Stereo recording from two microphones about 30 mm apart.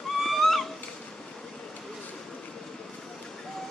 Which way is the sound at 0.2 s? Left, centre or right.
Centre.